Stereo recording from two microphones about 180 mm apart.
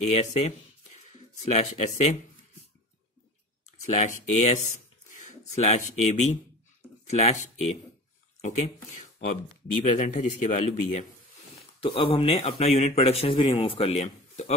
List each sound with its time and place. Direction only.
0.1 s speech: 35° left (ahead or behind)
3.8 s speech: 35° left (ahead or behind)
9.8 s speech: 45° left (ahead or behind)
11.8 s speech: 30° left (ahead or behind)